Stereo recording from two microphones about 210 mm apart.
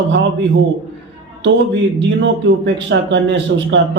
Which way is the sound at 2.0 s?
60° right (ahead or behind).